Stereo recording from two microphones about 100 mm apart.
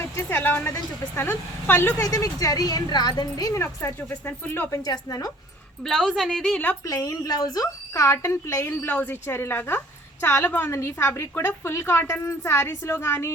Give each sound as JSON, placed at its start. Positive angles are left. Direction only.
{"t": 0.0, "sound": "a woman's voice", "side_deg": 25}
{"t": 3.6, "sound": "a woman's voice", "side_deg": 30}
{"t": 4.7, "sound": "a woman's voice", "side_deg": 40}
{"t": 5.8, "sound": "a woman's voice", "side_deg": 0}
{"t": 6.8, "sound": "a woman's voice", "side_deg": 35}